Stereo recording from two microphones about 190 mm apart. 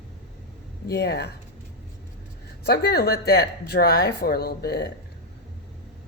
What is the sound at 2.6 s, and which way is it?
Speech, 55° left (ahead or behind).